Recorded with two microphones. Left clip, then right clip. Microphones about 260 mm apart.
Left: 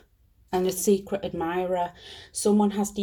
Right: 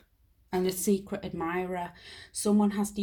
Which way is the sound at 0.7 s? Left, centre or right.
Right.